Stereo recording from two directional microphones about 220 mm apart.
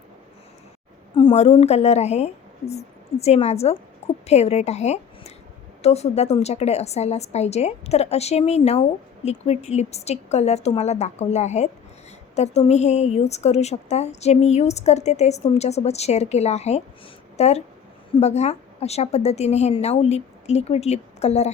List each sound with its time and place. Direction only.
1.1 s a woman's voice: 25° left (ahead or behind)